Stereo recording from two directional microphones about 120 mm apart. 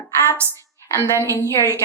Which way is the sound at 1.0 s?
20° right (ahead or behind).